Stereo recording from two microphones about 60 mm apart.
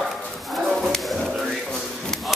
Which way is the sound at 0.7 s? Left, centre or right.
Centre.